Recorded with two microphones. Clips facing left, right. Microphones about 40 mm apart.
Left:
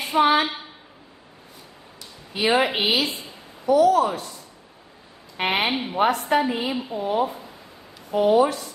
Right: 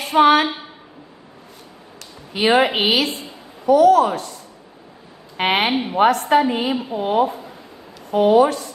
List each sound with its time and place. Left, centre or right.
0.1 s a woman's voice: right
2.0 s speech: right
5.4 s a woman's voice: right